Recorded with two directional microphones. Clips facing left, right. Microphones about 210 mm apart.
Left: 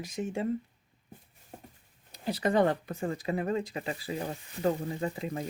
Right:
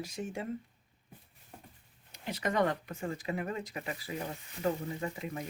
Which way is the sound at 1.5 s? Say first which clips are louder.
Left 5 dB; 45° left (ahead or behind).